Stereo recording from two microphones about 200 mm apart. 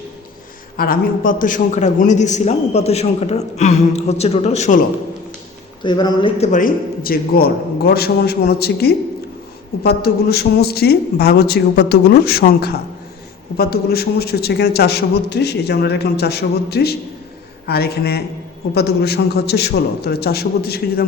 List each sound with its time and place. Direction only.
0.8 s a man's voice: 45° left (ahead or behind)
5.8 s speech: 20° left (ahead or behind)
6.4 s a man's voice: 40° left (ahead or behind)